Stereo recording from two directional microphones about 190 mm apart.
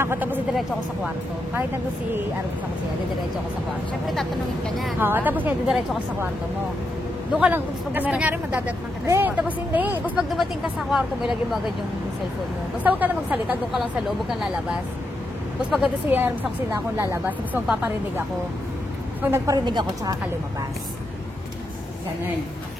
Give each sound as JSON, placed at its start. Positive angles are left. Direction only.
{"t": 0.0, "sound": "speech", "side_deg": -10}
{"t": 4.1, "sound": "speech", "side_deg": 0}
{"t": 5.0, "sound": "speech", "side_deg": -10}
{"t": 7.3, "sound": "speech", "side_deg": -10}
{"t": 12.8, "sound": "speech", "side_deg": -10}
{"t": 15.7, "sound": "speech", "side_deg": -5}
{"t": 19.2, "sound": "a woman's voice", "side_deg": -15}